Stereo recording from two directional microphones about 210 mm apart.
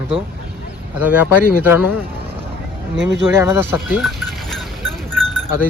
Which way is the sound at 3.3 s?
10° right (ahead or behind).